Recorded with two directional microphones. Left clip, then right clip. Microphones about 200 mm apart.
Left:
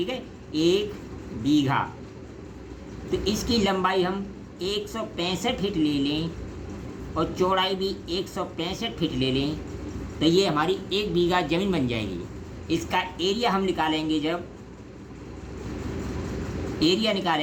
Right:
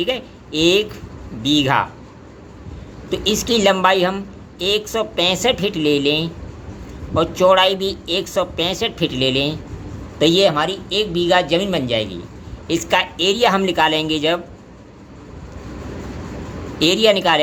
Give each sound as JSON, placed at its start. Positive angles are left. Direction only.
{"t": 0.0, "sound": "speech", "side_deg": -35}
{"t": 3.1, "sound": "speech", "side_deg": -40}
{"t": 16.8, "sound": "speech", "side_deg": -40}